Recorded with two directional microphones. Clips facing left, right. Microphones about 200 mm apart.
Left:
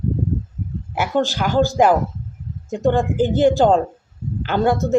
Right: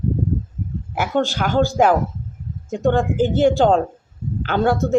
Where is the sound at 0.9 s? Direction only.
5° left (ahead or behind).